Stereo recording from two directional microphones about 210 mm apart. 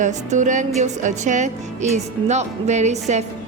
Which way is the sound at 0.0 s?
35° right (ahead or behind).